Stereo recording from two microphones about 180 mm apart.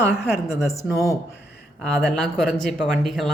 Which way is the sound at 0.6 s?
15° left (ahead or behind).